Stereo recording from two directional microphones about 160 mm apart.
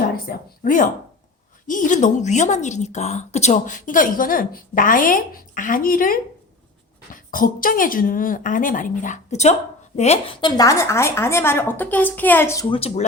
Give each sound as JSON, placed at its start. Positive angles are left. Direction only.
{"t": 0.3, "sound": "a woman's voice", "side_deg": 60}
{"t": 10.6, "sound": "a woman's voice", "side_deg": 20}
{"t": 12.7, "sound": "speech", "side_deg": 35}